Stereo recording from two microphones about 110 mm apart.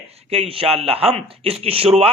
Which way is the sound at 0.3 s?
60° right (ahead or behind).